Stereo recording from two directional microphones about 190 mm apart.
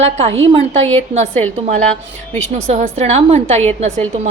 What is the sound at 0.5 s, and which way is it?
Speech, 30° right (ahead or behind).